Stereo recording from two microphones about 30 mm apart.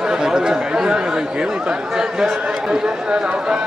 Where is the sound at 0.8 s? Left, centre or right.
Right.